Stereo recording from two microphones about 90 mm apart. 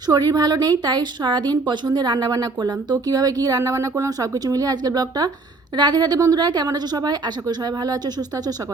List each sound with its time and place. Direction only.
0.1 s a woman's voice: 45° right (ahead or behind)